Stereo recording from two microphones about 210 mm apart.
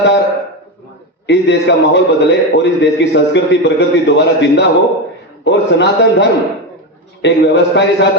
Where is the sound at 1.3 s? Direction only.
55° left (ahead or behind).